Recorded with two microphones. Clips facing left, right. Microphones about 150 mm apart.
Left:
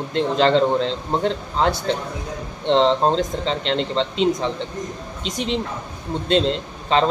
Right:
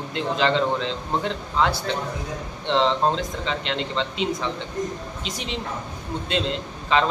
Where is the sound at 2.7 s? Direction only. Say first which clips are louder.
Left 4 dB; 35° left (ahead or behind).